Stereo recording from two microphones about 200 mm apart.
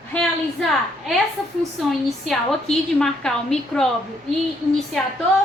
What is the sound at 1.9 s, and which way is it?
A woman's voice, centre (ahead or behind).